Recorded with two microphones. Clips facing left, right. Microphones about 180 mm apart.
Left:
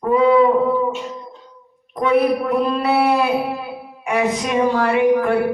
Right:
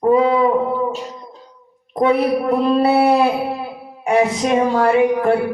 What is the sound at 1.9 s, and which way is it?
Speech, 35° right (ahead or behind).